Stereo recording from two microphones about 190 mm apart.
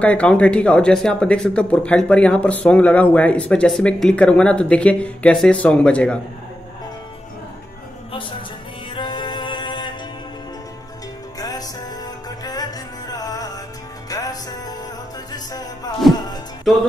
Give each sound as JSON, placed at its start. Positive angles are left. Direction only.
{"t": 0.0, "sound": "speech", "side_deg": 5}
{"t": 8.1, "sound": "music", "side_deg": 25}
{"t": 11.3, "sound": "music", "side_deg": 20}